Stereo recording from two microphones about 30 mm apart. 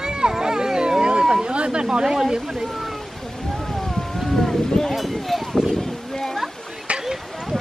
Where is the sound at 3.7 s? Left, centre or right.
Centre.